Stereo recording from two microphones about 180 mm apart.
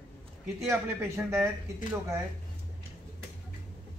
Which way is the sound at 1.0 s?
15° right (ahead or behind).